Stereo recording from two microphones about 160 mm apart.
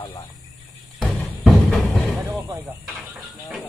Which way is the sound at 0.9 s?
Centre (ahead or behind).